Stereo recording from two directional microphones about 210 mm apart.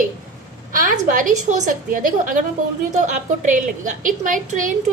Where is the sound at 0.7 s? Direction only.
40° right (ahead or behind).